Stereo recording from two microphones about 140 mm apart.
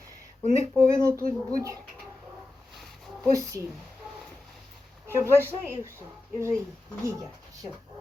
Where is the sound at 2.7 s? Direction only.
Centre (ahead or behind).